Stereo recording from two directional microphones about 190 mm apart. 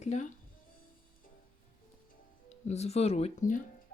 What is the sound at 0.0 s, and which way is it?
Speech, 40° left (ahead or behind).